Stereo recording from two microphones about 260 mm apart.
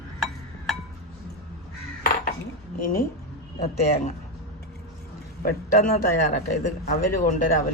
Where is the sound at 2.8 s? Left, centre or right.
Left.